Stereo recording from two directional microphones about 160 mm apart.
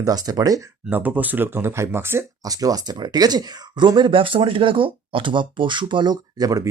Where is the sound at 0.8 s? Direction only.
10° right (ahead or behind).